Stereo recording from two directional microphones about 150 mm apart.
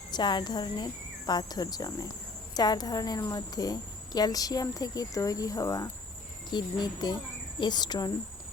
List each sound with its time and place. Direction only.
0.1 s a woman's voice: 30° left (ahead or behind)